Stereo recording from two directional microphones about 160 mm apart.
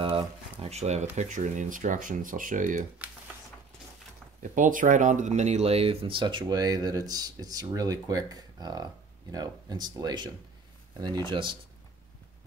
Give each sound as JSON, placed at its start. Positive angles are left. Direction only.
{"t": 0.0, "sound": "speech", "side_deg": -35}
{"t": 4.4, "sound": "speech", "side_deg": -55}